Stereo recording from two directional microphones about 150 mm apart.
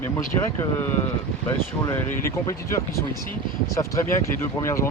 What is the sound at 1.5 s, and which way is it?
Speech, 15° left (ahead or behind).